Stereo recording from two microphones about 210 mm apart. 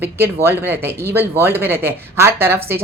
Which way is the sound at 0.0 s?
10° right (ahead or behind).